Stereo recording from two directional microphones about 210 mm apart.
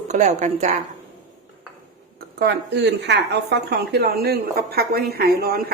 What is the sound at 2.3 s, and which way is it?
A woman's voice, 55° right (ahead or behind).